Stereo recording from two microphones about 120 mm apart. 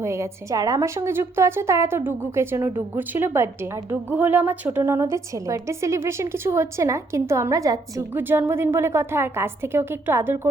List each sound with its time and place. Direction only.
0.0 s a woman's voice: 25° right (ahead or behind)
8.1 s a woman's voice: 15° right (ahead or behind)